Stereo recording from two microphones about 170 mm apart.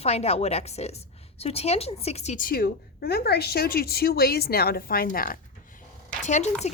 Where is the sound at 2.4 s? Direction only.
65° left (ahead or behind).